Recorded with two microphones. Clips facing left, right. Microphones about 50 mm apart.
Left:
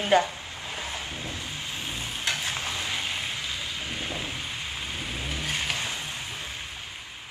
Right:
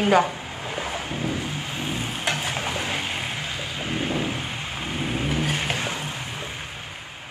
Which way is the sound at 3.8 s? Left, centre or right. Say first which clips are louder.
Right 7 dB; right.